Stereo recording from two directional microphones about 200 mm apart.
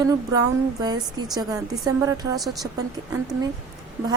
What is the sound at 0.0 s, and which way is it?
A woman's voice, 20° right (ahead or behind).